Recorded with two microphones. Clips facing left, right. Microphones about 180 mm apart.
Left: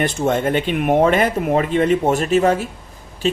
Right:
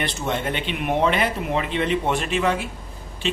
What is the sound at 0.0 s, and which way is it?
Speech, 45° left (ahead or behind).